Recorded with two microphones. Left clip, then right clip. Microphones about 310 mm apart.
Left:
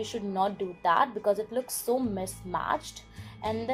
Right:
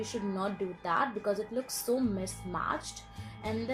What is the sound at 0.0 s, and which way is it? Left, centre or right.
A woman's voice, left.